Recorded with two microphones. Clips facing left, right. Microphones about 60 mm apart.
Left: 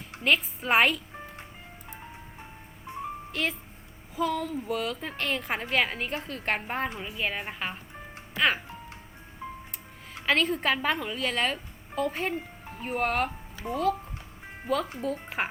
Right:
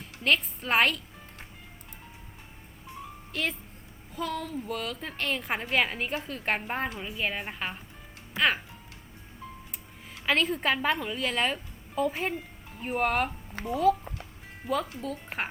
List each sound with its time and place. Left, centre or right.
0.2 s a woman's voice: centre
2.9 s music: left
3.3 s a woman's voice: centre
9.4 s music: left
10.2 s a woman's voice: centre
12.3 s music: left
12.8 s a woman's voice: centre